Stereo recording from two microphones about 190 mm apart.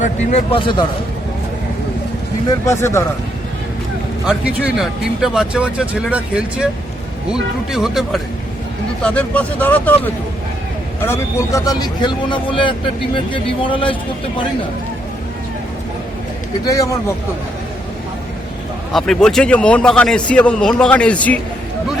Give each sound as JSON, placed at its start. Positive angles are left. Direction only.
{"t": 0.0, "sound": "speech", "side_deg": 40}
{"t": 0.6, "sound": "speech", "side_deg": 25}
{"t": 2.6, "sound": "speech", "side_deg": 15}
{"t": 4.3, "sound": "speech", "side_deg": -5}
{"t": 7.7, "sound": "speech", "side_deg": 0}
{"t": 11.0, "sound": "speech", "side_deg": 15}
{"t": 16.6, "sound": "speech", "side_deg": 15}
{"t": 18.9, "sound": "speech", "side_deg": 0}